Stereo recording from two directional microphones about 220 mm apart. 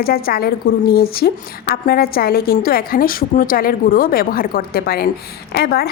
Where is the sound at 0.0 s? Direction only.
45° left (ahead or behind).